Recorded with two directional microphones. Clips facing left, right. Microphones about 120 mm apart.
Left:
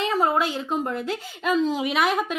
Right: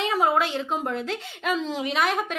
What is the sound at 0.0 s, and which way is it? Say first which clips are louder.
A woman's voice: even; 5° right (ahead or behind).